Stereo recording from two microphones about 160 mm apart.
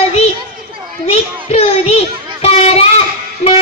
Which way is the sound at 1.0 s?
40° left (ahead or behind).